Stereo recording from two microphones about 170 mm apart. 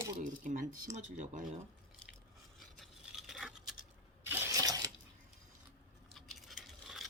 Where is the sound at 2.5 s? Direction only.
Centre (ahead or behind).